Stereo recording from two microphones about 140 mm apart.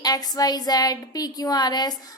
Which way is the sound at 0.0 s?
25° left (ahead or behind).